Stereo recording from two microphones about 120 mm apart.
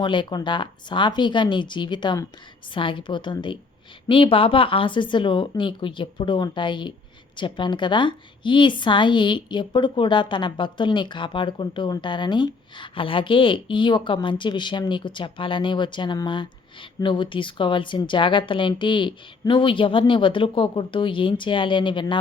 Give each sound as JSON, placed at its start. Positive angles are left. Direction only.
{"t": 0.0, "sound": "a woman's voice", "side_deg": 40}